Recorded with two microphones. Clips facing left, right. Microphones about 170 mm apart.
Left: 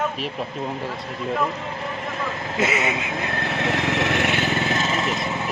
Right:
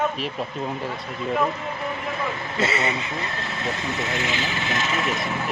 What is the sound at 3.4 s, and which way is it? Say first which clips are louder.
Speech: left 5 dB; 70° left (ahead or behind).